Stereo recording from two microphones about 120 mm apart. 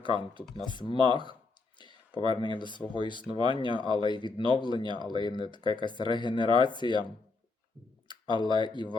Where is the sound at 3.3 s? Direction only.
40° right (ahead or behind).